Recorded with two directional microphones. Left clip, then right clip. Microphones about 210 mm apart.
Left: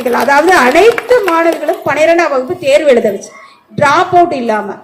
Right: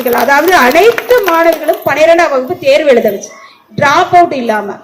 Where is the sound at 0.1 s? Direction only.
50° left (ahead or behind).